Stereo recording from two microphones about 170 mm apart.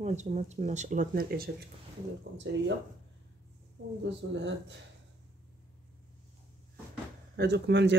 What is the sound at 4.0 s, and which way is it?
Speech, 90° right.